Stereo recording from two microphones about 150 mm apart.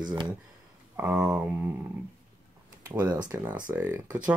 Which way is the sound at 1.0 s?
10° right (ahead or behind).